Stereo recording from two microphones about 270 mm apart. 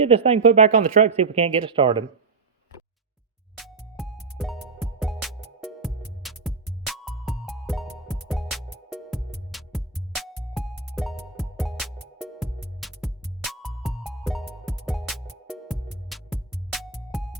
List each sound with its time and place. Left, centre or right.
0.0 s speech: right
3.6 s music: centre